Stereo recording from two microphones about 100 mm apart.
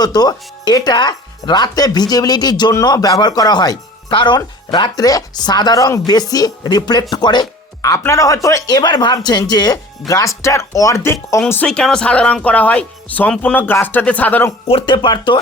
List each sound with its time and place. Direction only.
0.0 s speech: 40° left (ahead or behind)
7.8 s speech: 35° left (ahead or behind)
11.6 s speech: 10° left (ahead or behind)
14.7 s speech: 60° left (ahead or behind)